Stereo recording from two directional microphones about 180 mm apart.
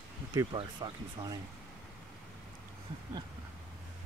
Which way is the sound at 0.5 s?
25° right (ahead or behind).